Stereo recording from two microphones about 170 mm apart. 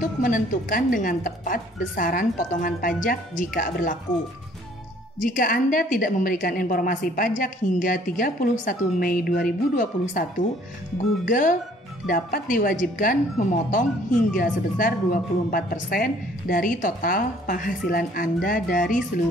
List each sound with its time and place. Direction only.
0.0 s a woman's voice: 50° left (ahead or behind)
5.2 s a woman's voice: 55° left (ahead or behind)
11.2 s a woman's voice: 55° left (ahead or behind)